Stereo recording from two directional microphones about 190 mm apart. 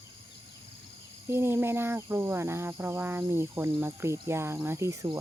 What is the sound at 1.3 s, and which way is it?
Cricket, 10° right (ahead or behind).